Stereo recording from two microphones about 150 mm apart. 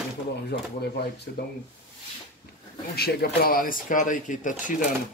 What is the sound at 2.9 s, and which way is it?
Speech, 90° left.